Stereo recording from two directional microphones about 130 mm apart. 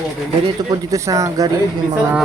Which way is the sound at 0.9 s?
25° right (ahead or behind).